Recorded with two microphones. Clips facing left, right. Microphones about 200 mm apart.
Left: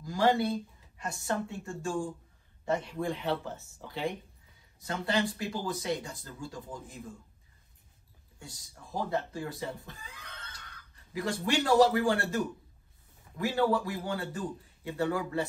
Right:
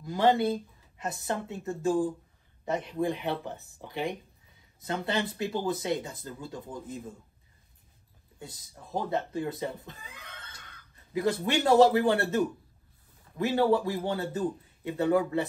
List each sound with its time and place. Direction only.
0.0 s speech: 20° right (ahead or behind)
8.4 s speech: 20° right (ahead or behind)
11.1 s speech: 20° right (ahead or behind)
13.4 s speech: 25° right (ahead or behind)